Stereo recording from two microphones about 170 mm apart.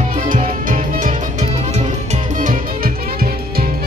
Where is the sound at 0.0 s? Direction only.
50° right (ahead or behind).